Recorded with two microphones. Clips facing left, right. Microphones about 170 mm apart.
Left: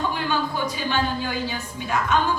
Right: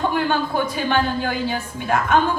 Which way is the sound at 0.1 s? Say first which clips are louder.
Right 4 dB; 55° right (ahead or behind).